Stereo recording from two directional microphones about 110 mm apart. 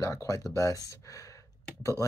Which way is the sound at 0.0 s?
30° left (ahead or behind).